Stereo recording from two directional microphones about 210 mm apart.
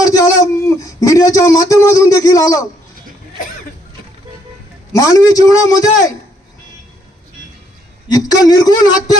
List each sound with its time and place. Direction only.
0.0 s speech: 15° left (ahead or behind)
4.9 s a man's voice: 15° left (ahead or behind)
8.1 s a man's voice: 20° left (ahead or behind)